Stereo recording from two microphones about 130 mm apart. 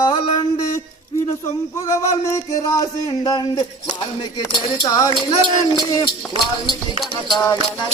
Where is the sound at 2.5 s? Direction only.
25° left (ahead or behind).